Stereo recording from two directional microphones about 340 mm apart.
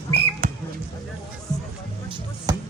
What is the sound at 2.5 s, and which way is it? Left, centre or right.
Music, centre.